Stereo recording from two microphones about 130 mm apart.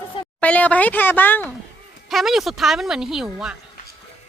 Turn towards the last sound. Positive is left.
turn(degrees=-5)  # may be behind; listen again after turning